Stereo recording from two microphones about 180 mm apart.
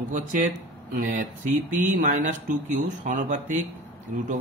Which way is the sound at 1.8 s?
45° right (ahead or behind).